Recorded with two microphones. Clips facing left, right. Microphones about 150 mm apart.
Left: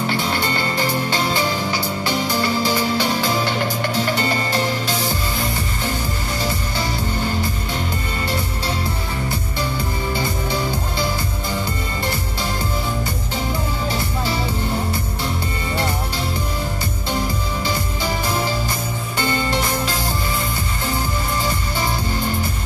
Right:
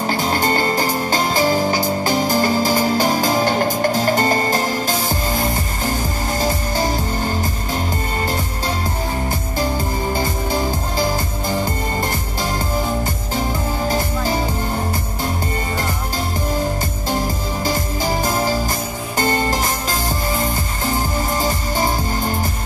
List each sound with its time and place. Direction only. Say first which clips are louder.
0.0 s music: right 3 dB; 40° right (ahead or behind)
10.1 s music: right 1 dB; 45° right (ahead or behind)
13.8 s music: right 5 dB; 45° right (ahead or behind)
17.6 s music: right 5 dB; 45° right (ahead or behind)